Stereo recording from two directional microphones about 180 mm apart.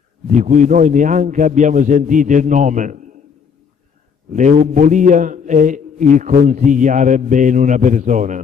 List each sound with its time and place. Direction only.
0.3 s a man's voice: 45° right (ahead or behind)
4.3 s a man's voice: 45° right (ahead or behind)